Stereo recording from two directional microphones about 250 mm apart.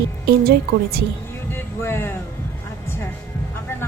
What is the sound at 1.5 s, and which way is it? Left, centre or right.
Speech, centre.